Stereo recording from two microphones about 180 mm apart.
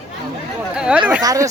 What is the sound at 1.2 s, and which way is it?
Speech, 20° right (ahead or behind).